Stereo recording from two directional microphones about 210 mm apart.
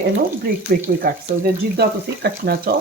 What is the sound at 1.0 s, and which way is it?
Speech, 45° right (ahead or behind).